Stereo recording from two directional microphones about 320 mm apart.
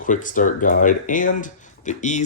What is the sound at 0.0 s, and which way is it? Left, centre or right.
Speech, left.